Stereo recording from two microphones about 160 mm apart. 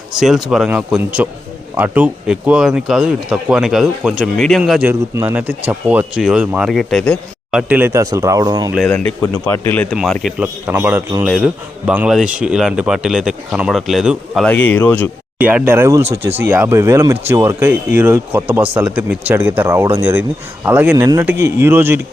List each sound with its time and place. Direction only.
0.2 s speech: centre (ahead or behind)
4.9 s speech: 15° right (ahead or behind); by 7.6 s centre (ahead or behind)
7.7 s speech: 15° right (ahead or behind)
9.2 s speech: 10° left (ahead or behind)
10.0 s speech: centre (ahead or behind)
14.5 s speech: 10° left (ahead or behind)
15.4 s speech: 10° right (ahead or behind)